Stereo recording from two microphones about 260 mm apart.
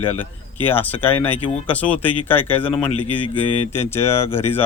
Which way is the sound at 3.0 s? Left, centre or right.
Left.